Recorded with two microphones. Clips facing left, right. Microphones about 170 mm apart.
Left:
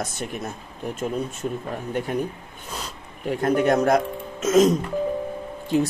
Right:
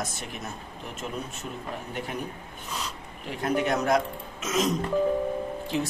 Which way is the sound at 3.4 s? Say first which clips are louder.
Left 6 dB; 45° left (ahead or behind).